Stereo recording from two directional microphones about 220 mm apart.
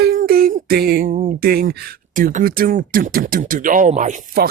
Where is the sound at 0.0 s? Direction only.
45° right (ahead or behind).